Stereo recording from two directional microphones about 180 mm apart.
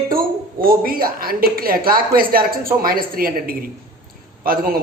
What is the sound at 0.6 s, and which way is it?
A woman's voice, 55° right (ahead or behind).